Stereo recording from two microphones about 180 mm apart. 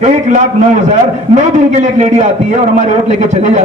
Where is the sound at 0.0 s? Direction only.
40° right (ahead or behind).